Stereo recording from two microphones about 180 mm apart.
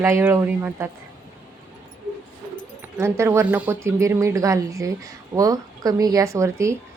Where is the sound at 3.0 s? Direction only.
15° right (ahead or behind).